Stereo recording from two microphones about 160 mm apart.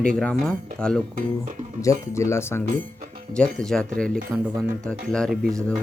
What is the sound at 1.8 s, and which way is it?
Speech, 20° left (ahead or behind).